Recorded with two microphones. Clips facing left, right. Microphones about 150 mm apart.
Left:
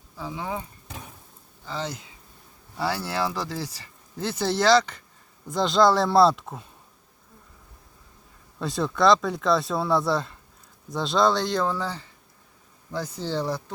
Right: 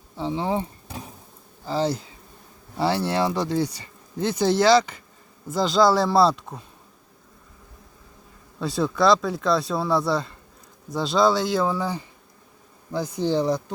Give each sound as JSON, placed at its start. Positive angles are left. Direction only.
{"t": 0.2, "sound": "insect", "side_deg": -30}
{"t": 1.6, "sound": "speech", "side_deg": -35}
{"t": 8.5, "sound": "speech", "side_deg": 0}